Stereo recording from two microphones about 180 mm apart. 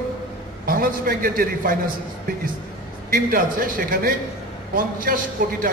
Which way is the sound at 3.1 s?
50° right (ahead or behind).